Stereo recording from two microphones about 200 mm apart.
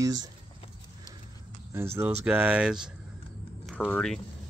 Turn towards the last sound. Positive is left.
turn(degrees=5)  # may be behind; listen again after turning